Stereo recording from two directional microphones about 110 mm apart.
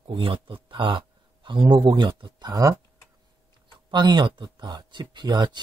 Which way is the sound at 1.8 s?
45° right (ahead or behind).